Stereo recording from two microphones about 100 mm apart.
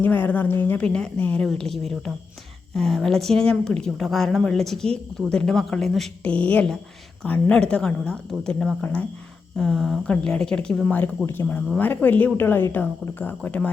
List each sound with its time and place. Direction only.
0.0 s a woman's voice: 15° left (ahead or behind)
6.3 s speech: 15° left (ahead or behind)
9.6 s a woman's voice: centre (ahead or behind)
11.3 s speech: 20° left (ahead or behind)